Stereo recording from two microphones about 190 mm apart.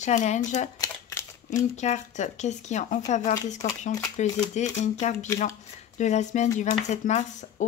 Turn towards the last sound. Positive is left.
turn(degrees=40)  # may be behind; listen again after turning